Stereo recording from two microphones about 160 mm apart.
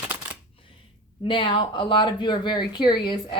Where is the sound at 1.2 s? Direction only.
30° left (ahead or behind).